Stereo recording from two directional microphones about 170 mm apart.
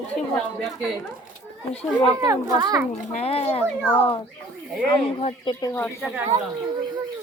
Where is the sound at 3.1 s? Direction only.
35° left (ahead or behind); by 5.9 s 15° left (ahead or behind).